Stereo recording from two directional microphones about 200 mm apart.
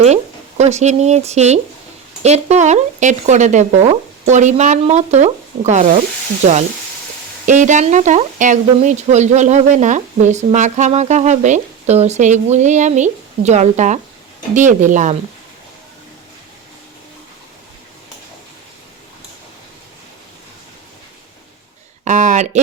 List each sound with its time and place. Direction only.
0.0 s speech: 35° right (ahead or behind)
22.0 s speech: 40° right (ahead or behind)